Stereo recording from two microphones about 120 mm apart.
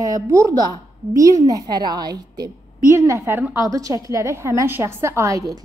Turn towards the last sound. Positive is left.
turn(degrees=-25)  # may be behind; listen again after turning